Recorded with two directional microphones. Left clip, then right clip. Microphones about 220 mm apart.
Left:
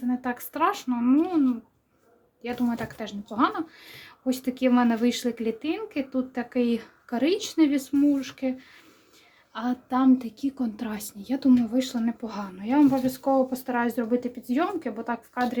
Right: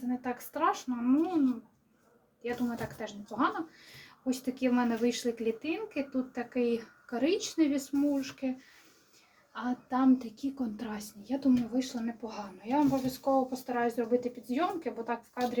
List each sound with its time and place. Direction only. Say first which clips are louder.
0.2 s speech: left 4 dB; 35° left (ahead or behind)